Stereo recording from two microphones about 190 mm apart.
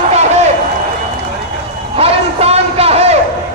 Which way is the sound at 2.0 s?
30° right (ahead or behind).